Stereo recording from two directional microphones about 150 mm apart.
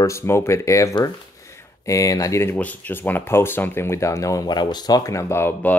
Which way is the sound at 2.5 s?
10° left (ahead or behind).